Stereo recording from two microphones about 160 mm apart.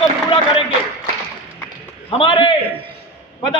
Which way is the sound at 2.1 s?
30° left (ahead or behind).